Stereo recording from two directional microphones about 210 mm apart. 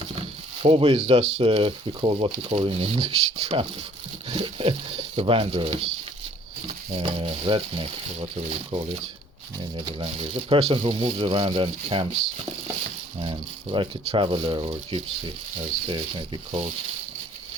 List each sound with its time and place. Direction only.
0.2 s speech: 25° right (ahead or behind)
13.1 s speech: 25° right (ahead or behind)